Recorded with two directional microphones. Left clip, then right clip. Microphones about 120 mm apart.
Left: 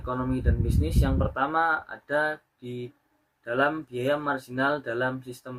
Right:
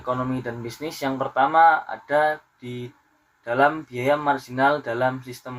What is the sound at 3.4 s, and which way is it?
Speech, 35° left (ahead or behind).